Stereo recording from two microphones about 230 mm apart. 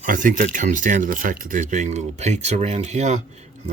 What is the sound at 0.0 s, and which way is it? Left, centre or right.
Speech, right.